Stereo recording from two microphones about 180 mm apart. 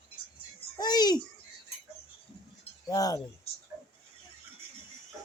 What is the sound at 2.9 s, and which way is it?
Speech, 20° left (ahead or behind).